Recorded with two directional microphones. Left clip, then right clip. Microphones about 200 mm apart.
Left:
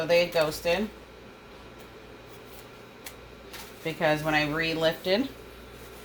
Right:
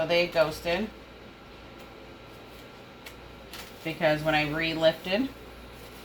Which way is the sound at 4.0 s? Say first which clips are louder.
Even; 30° left (ahead or behind).